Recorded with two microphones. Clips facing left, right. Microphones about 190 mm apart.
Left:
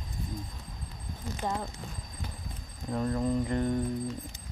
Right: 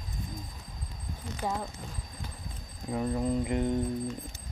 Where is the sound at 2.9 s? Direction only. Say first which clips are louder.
Even; 10° right (ahead or behind).